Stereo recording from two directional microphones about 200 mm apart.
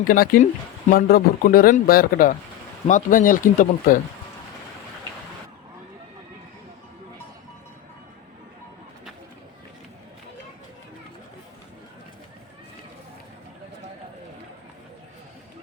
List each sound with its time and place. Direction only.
0.0 s speech: 45° left (ahead or behind)